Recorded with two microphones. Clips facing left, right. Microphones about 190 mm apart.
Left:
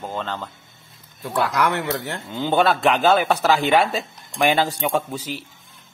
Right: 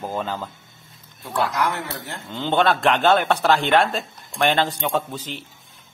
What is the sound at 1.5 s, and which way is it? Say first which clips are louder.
Speech: left 3 dB; 75° left (ahead or behind).